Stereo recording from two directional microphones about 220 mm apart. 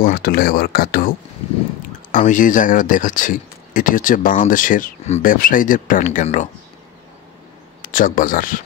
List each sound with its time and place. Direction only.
0.0 s speech: 40° left (ahead or behind)
2.1 s speech: 35° left (ahead or behind)
7.8 s speech: 40° left (ahead or behind)